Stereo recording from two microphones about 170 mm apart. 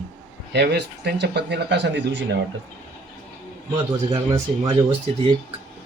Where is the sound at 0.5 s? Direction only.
75° right (ahead or behind).